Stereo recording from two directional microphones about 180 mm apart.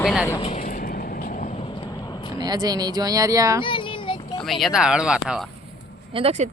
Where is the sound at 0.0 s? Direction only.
5° right (ahead or behind).